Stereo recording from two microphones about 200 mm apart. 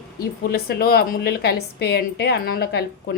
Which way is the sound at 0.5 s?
50° left (ahead or behind).